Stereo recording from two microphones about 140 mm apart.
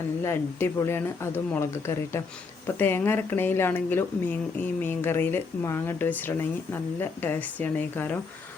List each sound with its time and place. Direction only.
0.2 s a woman's voice: 20° left (ahead or behind)